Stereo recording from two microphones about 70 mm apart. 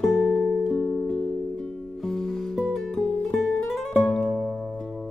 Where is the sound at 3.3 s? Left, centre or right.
Centre.